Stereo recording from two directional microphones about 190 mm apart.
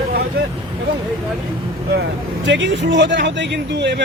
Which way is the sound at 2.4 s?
75° right (ahead or behind).